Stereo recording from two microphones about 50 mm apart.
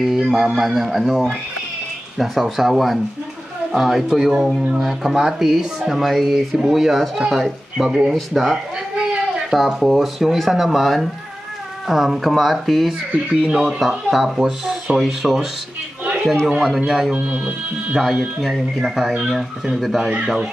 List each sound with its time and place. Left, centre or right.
0.0 s speech: centre
7.7 s speech: centre
8.1 s speech: centre
9.6 s speech: centre
13.1 s speech: centre
16.5 s speech: centre